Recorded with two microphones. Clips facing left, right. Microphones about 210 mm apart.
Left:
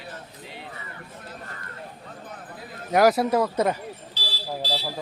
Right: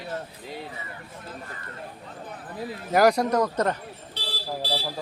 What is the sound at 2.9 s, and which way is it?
Speech, centre (ahead or behind).